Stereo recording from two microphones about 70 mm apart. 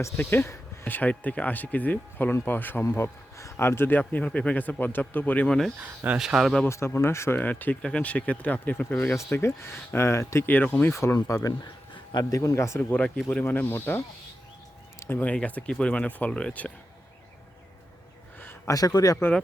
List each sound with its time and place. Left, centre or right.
0.2 s speech: left
2.9 s speech: left
5.5 s speech: centre
5.8 s speech: right
6.1 s speech: centre
6.7 s speech: left
7.3 s speech: left
10.4 s speech: left
11.3 s speech: left
13.5 s speech: left
14.9 s a sound: left
15.2 s speech: left
18.3 s a sound: left
18.7 s speech: left